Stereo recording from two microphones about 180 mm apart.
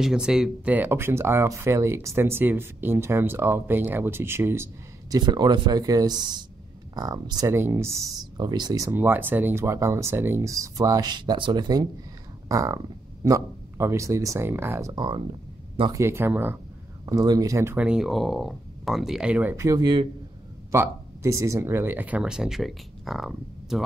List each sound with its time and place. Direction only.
0.0 s speech: 5° right (ahead or behind)
5.1 s speech: 25° right (ahead or behind)
16.0 s speech: 15° right (ahead or behind)
20.7 s speech: 15° right (ahead or behind)